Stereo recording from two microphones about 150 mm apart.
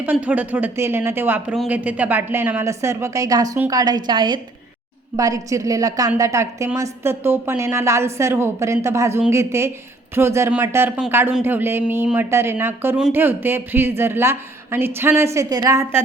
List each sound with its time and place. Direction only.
0.0 s a woman's voice: 10° right (ahead or behind)